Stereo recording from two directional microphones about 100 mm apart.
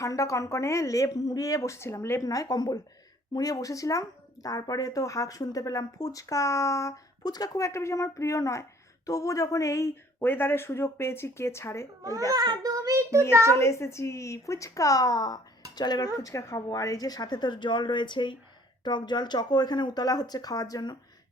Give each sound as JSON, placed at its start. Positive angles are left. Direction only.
{"t": 0.0, "sound": "speech", "side_deg": 35}
{"t": 12.3, "sound": "a child's voice", "side_deg": -40}
{"t": 13.6, "sound": "speech", "side_deg": 30}
{"t": 16.2, "sound": "speech", "side_deg": 35}